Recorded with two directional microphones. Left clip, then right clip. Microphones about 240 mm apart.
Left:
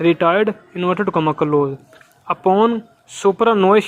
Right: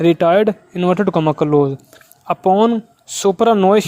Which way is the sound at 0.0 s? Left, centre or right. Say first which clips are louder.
Right 2 dB; right.